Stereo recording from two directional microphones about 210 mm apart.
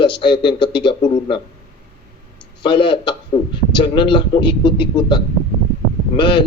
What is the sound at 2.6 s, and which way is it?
Speech, 25° left (ahead or behind).